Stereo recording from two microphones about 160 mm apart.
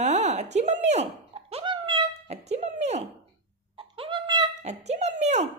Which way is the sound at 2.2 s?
45° right (ahead or behind).